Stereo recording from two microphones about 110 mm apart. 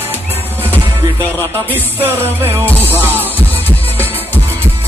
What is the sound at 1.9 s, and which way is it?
Music, 20° right (ahead or behind).